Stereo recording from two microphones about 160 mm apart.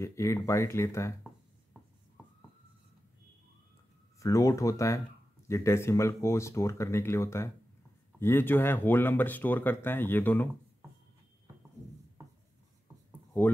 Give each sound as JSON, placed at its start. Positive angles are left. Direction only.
{"t": 0.0, "sound": "speech", "side_deg": 20}
{"t": 4.2, "sound": "speech", "side_deg": 20}